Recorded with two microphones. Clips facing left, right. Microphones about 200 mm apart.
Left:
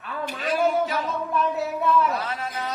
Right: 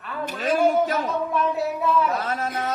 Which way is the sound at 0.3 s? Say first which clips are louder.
Right 3 dB; 45° right (ahead or behind).